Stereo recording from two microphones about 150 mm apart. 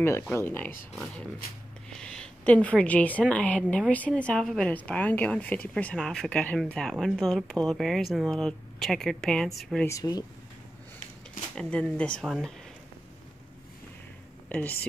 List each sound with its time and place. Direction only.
0.3 s speech: 15° left (ahead or behind)
2.0 s a woman's voice: 5° left (ahead or behind)
9.8 s speech: 25° left (ahead or behind)
11.5 s speech: 10° left (ahead or behind)